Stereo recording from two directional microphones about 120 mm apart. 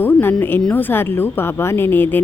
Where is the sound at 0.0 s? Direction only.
15° left (ahead or behind).